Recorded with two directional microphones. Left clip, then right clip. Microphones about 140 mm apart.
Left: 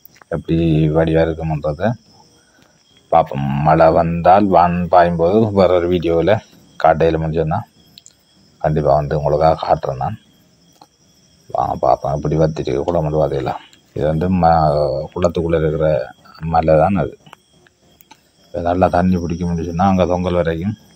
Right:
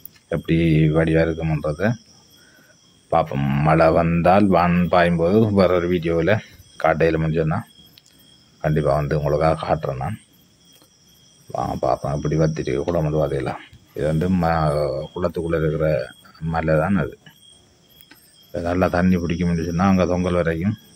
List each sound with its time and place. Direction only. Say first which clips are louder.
0.3 s speech: left 2 dB; 5° right (ahead or behind)
3.1 s speech: left 6 dB; 5° right (ahead or behind)
5.8 s speech: left 5 dB; 15° left (ahead or behind)
6.8 s speech: left 5 dB; centre (ahead or behind)
8.7 s speech: left 5 dB; centre (ahead or behind)
11.8 s speech: left 5 dB; centre (ahead or behind)
15.4 s speech: left 5 dB; 15° left (ahead or behind)
15.7 s speech: left 5 dB; centre (ahead or behind)
16.4 s speech: left 8 dB; 20° left (ahead or behind)
18.5 s speech: left 6 dB; 5° left (ahead or behind)